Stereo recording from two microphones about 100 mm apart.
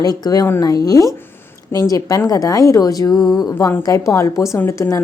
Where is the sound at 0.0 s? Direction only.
40° left (ahead or behind).